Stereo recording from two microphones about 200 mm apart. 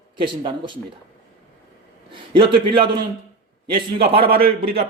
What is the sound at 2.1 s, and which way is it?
Speech, 25° right (ahead or behind).